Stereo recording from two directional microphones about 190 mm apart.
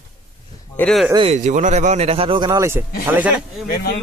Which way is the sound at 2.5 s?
15° right (ahead or behind).